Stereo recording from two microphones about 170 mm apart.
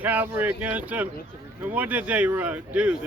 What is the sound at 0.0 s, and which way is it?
Speech, 10° right (ahead or behind).